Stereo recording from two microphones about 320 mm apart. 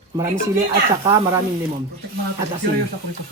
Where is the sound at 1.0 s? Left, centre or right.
Centre.